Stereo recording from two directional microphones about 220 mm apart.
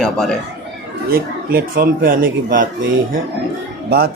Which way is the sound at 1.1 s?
40° right (ahead or behind).